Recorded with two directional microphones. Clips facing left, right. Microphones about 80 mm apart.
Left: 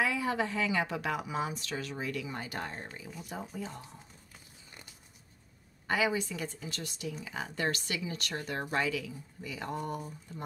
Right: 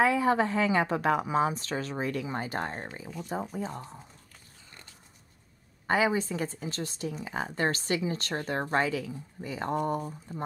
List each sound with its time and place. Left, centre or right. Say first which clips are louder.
0.0 s speech: right 7 dB; right
5.9 s speech: right 4 dB; right